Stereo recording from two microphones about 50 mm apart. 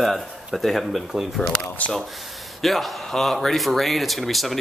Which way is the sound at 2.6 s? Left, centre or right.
Centre.